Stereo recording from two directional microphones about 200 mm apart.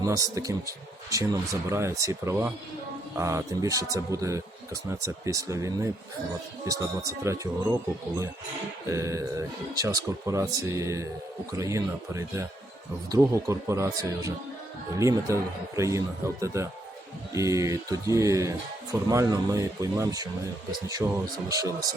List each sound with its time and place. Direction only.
0.0 s speech: 15° right (ahead or behind)
7.3 s speech: 15° right (ahead or behind)